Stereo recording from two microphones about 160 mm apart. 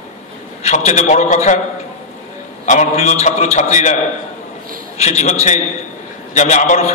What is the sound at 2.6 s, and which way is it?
A man's voice, 45° left (ahead or behind).